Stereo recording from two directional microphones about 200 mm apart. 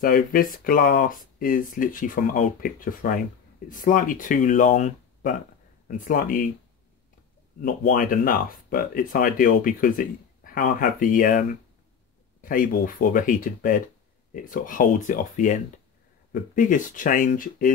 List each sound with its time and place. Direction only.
0.0 s speech: 45° left (ahead or behind)
7.6 s speech: 45° left (ahead or behind)